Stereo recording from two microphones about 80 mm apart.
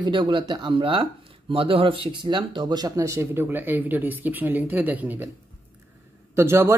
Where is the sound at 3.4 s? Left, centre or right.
Right.